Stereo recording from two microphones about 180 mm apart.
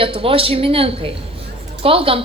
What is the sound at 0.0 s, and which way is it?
A woman's voice, 30° right (ahead or behind).